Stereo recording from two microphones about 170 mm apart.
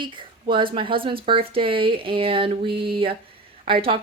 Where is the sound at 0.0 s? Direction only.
30° right (ahead or behind).